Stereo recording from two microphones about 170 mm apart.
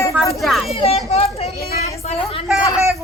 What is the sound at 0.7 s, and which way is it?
A woman's voice, 35° left (ahead or behind).